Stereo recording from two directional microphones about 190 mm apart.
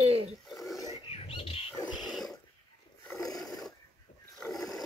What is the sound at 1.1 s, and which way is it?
Bird, 30° left (ahead or behind).